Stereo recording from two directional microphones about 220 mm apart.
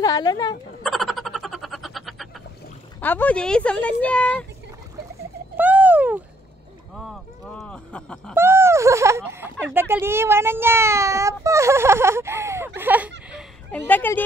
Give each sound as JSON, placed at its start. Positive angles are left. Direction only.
{"t": 0.0, "sound": "speech", "side_deg": 15}
{"t": 0.8, "sound": "frog", "side_deg": 0}
{"t": 3.0, "sound": "speech", "side_deg": 10}
{"t": 5.6, "sound": "a sound", "side_deg": -5}
{"t": 7.0, "sound": "speech", "side_deg": 0}
{"t": 8.4, "sound": "speech", "side_deg": -10}
{"t": 13.3, "sound": "a sound", "side_deg": 0}